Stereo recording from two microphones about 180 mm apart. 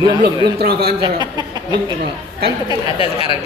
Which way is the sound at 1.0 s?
20° right (ahead or behind).